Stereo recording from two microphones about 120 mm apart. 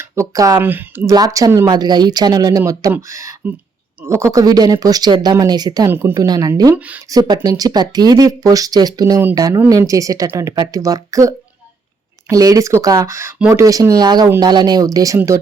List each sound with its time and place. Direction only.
0.0 s speech: 25° right (ahead or behind)
1.1 s speech: 30° right (ahead or behind)
5.9 s speech: 20° right (ahead or behind)
6.1 s speech: 35° right (ahead or behind)
6.7 s speech: 10° right (ahead or behind)
7.1 s speech: 35° right (ahead or behind)